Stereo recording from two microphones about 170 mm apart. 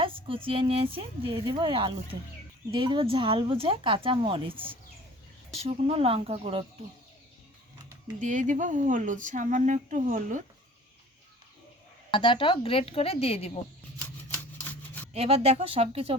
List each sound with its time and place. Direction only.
0.0 s speech: 30° right (ahead or behind)
4.5 s speech: 10° right (ahead or behind)
5.6 s speech: 35° right (ahead or behind)
8.2 s speech: 50° right (ahead or behind)
12.1 s a woman's voice: 30° left (ahead or behind)
15.1 s speech: 35° right (ahead or behind)